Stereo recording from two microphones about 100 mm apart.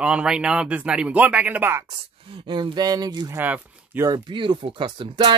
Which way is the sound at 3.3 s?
15° right (ahead or behind).